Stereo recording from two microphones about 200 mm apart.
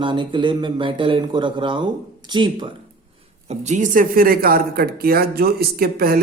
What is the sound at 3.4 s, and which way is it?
Speech, 35° right (ahead or behind).